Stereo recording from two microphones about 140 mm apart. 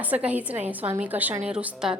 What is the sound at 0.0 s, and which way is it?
A woman's voice, 10° right (ahead or behind).